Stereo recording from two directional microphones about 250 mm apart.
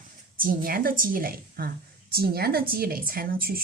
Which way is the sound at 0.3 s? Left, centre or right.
Right.